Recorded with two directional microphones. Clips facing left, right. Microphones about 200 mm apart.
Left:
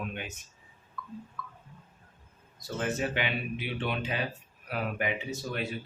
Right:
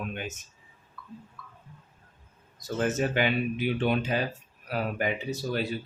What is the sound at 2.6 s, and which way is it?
Speech, 45° right (ahead or behind).